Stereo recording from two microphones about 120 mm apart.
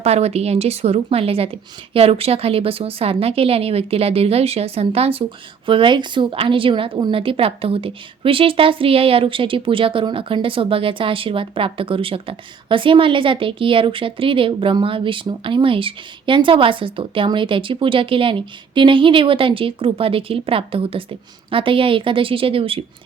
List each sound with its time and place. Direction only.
0.0 s a woman's voice: 60° right (ahead or behind)